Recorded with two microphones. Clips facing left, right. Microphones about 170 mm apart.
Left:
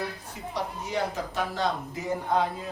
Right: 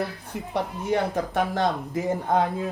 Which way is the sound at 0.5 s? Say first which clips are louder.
Right 6 dB; 55° right (ahead or behind).